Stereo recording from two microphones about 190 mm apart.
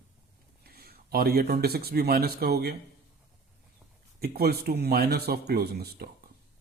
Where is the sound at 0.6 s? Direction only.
55° right (ahead or behind).